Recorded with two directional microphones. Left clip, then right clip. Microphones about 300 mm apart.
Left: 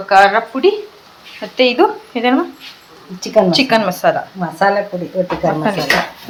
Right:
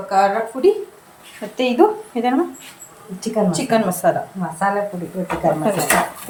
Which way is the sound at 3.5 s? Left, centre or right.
Centre.